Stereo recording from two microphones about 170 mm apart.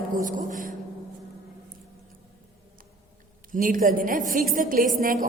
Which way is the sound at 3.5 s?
50° right (ahead or behind).